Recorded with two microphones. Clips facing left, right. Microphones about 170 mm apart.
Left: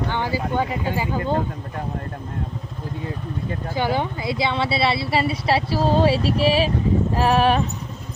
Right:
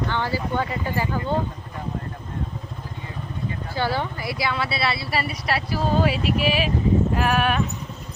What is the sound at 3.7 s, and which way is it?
A woman's voice, 15° left (ahead or behind).